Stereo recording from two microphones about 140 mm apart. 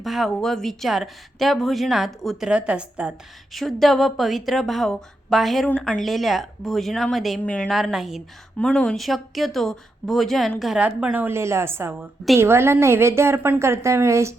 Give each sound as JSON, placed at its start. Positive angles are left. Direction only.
{"t": 0.0, "sound": "a woman's voice", "side_deg": 0}